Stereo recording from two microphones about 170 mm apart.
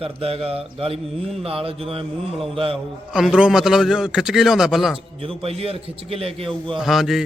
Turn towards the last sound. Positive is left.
turn(degrees=0)  # may be behind; listen again after turning